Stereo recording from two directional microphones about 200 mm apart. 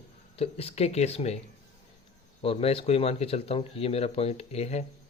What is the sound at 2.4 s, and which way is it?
Speech, 30° left (ahead or behind).